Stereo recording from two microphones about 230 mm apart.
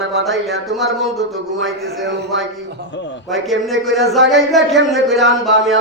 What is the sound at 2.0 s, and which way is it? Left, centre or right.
Speech, right.